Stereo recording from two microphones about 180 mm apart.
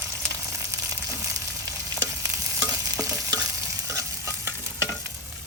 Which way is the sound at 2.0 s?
15° right (ahead or behind).